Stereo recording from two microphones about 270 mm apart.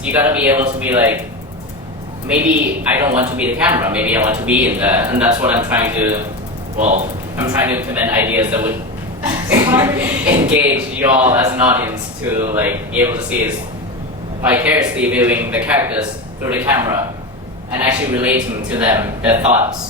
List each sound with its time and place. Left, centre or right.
0.0 s a woman's voice: centre
2.9 s a woman's voice: centre
6.7 s speech: right
7.3 s a woman's voice: centre
14.4 s a woman's voice: centre